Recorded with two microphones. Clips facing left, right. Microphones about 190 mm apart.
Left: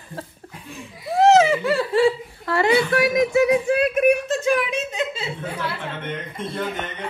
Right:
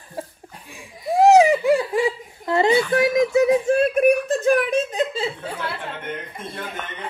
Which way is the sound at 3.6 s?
45° right (ahead or behind).